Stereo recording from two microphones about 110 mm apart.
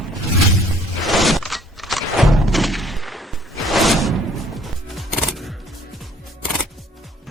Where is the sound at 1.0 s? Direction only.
Centre (ahead or behind).